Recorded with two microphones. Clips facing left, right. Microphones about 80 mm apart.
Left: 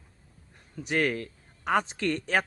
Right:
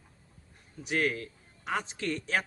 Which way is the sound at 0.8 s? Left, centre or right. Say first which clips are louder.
Left 3 dB; left.